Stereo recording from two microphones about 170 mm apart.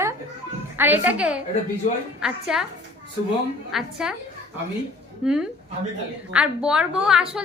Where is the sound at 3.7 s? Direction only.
5° right (ahead or behind).